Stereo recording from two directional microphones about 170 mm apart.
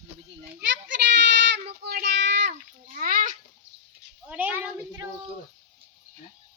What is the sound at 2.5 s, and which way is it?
Speech, 50° right (ahead or behind).